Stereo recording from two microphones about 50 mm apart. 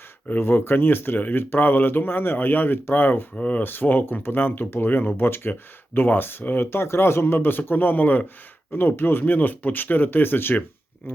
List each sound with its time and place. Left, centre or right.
0.3 s speech: left
3.3 s speech: left
3.6 s speech: left
6.7 s speech: left
8.7 s speech: left